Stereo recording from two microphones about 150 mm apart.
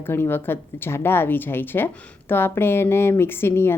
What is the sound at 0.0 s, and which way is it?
A woman's voice, 15° left (ahead or behind).